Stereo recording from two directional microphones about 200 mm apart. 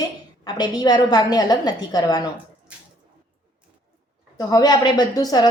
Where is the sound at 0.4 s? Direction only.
20° left (ahead or behind).